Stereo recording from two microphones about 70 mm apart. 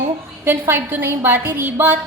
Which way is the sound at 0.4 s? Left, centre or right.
Right.